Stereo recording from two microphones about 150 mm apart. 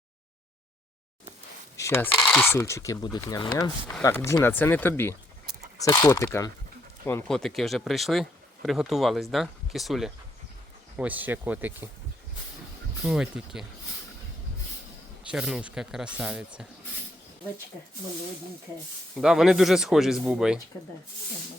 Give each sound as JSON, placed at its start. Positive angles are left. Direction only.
{"t": 1.7, "sound": "a sound", "side_deg": 20}
{"t": 2.1, "sound": "speech", "side_deg": 5}
{"t": 2.5, "sound": "speech", "side_deg": 20}
{"t": 7.3, "sound": "speech", "side_deg": 5}
{"t": 13.1, "sound": "speech", "side_deg": -5}
{"t": 15.2, "sound": "speech", "side_deg": -5}
{"t": 19.1, "sound": "speech", "side_deg": 0}